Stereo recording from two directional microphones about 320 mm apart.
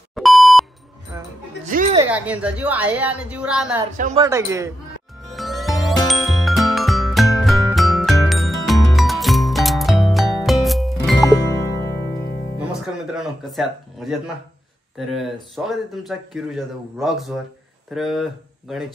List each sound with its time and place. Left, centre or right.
0.1 s beep: centre
1.7 s a sound: right
2.0 s speech: centre
4.0 s speech: centre
5.2 s ding: centre
11.0 s music: centre
11.2 s music: centre
13.1 s speech: centre